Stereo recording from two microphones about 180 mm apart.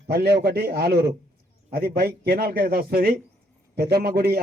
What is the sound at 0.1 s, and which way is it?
A man's voice, 60° right (ahead or behind).